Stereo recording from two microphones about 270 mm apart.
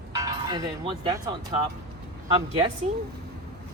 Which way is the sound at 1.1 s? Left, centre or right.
Centre.